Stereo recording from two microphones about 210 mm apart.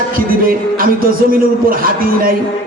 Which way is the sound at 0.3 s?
45° right (ahead or behind).